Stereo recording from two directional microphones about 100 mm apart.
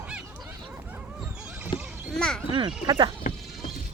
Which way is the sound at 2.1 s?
5° left (ahead or behind).